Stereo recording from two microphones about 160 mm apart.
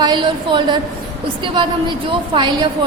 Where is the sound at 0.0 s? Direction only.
30° right (ahead or behind).